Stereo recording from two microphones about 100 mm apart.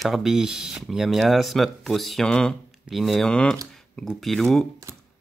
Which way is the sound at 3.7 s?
5° left (ahead or behind).